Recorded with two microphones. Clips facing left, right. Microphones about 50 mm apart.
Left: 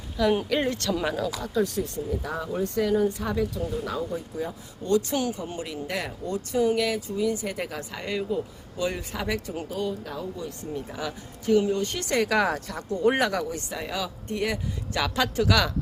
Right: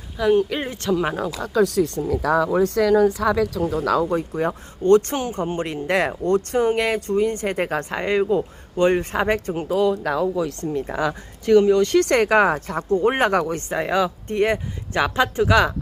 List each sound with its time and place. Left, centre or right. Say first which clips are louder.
0.4 s speech: right 1 dB; centre
1.0 s speech: right 3 dB; right
1.4 s speech: right 7 dB; right
9.6 s speech: right 15 dB; right
10.8 s speech: right 10 dB; right
12.3 s speech: right 7 dB; right